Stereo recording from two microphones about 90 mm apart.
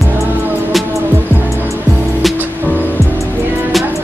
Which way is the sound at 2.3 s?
20° right (ahead or behind).